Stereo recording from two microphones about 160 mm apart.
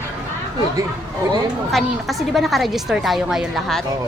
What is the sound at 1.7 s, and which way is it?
A woman's voice, centre (ahead or behind).